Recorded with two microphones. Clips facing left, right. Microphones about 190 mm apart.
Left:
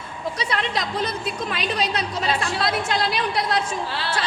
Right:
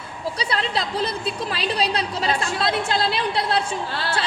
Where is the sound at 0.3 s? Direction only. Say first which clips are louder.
Right 1 dB; 30° right (ahead or behind).